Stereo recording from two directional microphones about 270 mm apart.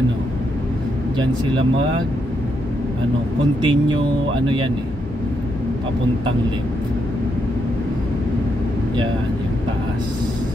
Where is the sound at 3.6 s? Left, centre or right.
Centre.